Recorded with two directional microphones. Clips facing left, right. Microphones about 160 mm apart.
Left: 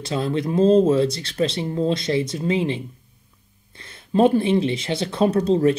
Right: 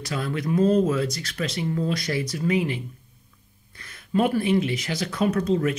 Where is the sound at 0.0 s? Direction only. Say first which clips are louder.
Left 5 dB; 25° left (ahead or behind).